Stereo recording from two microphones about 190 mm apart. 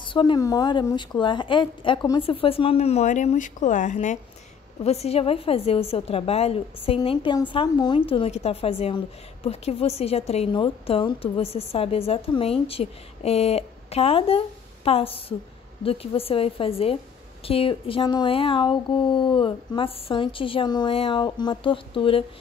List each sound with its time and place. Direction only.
0.0 s a woman's voice: 25° left (ahead or behind)